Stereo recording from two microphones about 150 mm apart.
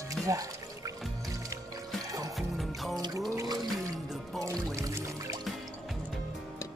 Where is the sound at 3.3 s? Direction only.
25° right (ahead or behind).